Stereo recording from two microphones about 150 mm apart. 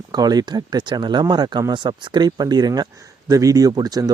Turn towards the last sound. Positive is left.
turn(degrees=-25)  # may be behind; listen again after turning